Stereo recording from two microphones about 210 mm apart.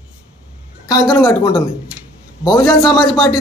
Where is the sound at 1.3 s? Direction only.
20° left (ahead or behind).